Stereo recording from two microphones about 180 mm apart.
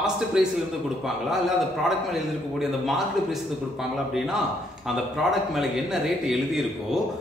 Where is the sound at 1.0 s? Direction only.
Centre (ahead or behind).